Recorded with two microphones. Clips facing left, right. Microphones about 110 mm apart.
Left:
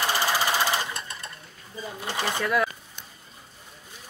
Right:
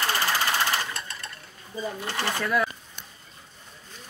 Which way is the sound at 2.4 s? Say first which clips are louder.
Left 1 dB; centre (ahead or behind).